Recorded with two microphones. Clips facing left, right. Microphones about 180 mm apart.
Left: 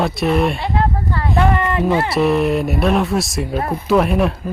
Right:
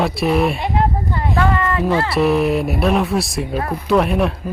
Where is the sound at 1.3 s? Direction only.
20° left (ahead or behind).